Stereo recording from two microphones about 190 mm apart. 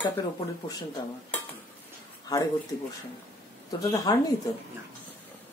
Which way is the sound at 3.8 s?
20° left (ahead or behind).